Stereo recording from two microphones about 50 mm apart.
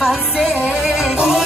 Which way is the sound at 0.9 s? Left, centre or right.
Centre.